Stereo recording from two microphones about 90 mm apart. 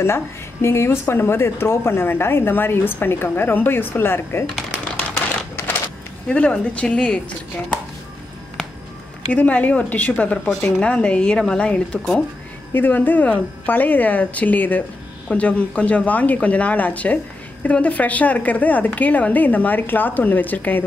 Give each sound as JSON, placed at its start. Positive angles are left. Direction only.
{"t": 0.0, "sound": "speech", "side_deg": 30}
{"t": 6.2, "sound": "a woman's voice", "side_deg": 15}
{"t": 9.3, "sound": "a woman's voice", "side_deg": 15}
{"t": 12.7, "sound": "a woman's voice", "side_deg": 20}